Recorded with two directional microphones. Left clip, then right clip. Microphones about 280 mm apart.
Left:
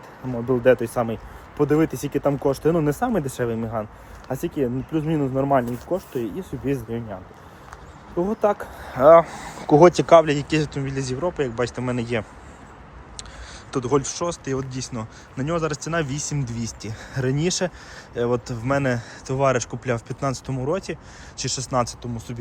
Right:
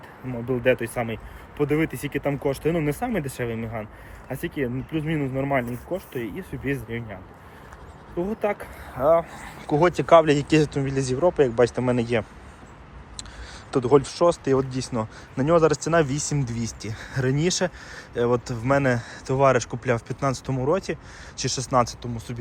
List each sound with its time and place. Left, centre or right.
0.4 s speech: centre
8.2 s speech: centre
9.0 s speech: left
9.3 s speech: centre
13.7 s speech: centre